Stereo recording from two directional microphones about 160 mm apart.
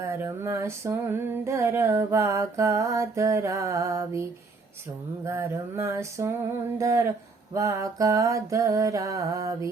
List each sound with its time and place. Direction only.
0.0 s female singing: 20° right (ahead or behind)
5.2 s a sound: 15° right (ahead or behind)
6.7 s female singing: 20° right (ahead or behind)